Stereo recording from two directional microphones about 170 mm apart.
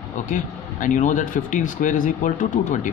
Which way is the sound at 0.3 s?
50° left (ahead or behind).